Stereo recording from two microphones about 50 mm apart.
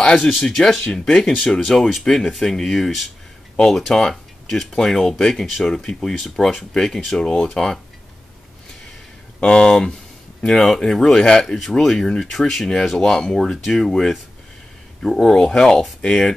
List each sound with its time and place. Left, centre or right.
0.0 s speech: centre
0.4 s speech: centre
9.4 s speech: centre
15.2 s speech: centre